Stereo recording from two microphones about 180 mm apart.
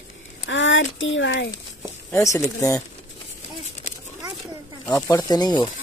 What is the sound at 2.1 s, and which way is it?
Speech, 15° left (ahead or behind).